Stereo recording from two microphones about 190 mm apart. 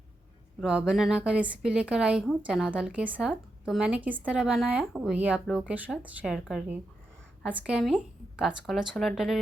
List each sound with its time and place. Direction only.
0.6 s a woman's voice: 5° right (ahead or behind)